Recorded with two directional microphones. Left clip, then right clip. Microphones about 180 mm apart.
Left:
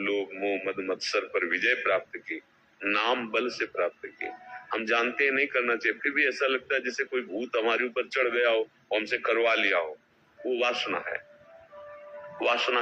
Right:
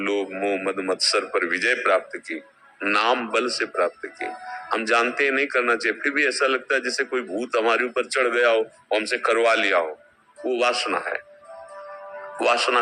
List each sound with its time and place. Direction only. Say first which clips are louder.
0.0 s speech: right 5 dB; 35° right (ahead or behind)
12.4 s speech: right 6 dB; 35° right (ahead or behind)